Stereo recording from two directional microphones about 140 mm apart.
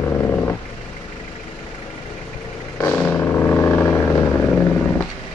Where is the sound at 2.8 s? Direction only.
15° left (ahead or behind).